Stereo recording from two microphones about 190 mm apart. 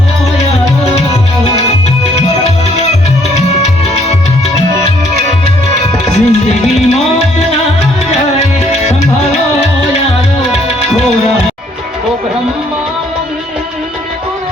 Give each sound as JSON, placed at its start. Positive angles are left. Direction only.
{"t": 6.1, "sound": "music", "side_deg": 35}